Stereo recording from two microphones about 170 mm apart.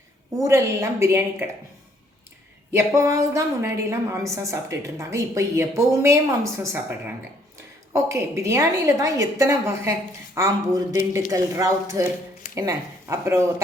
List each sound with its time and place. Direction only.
0.3 s a woman's voice: 20° right (ahead or behind)
2.7 s a woman's voice: 15° right (ahead or behind)
7.9 s a woman's voice: 15° right (ahead or behind)